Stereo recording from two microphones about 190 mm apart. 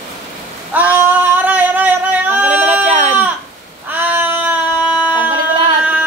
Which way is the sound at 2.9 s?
35° right (ahead or behind).